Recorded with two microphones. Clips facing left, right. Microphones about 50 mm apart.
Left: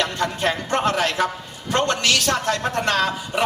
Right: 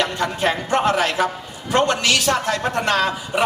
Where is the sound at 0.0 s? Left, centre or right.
Centre.